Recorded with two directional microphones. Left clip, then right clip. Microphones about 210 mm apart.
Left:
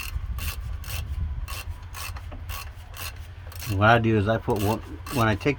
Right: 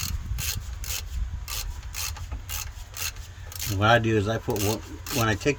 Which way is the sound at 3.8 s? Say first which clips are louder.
Left 1 dB; 25° left (ahead or behind).